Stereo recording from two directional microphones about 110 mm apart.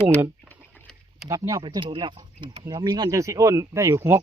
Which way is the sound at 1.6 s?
50° right (ahead or behind).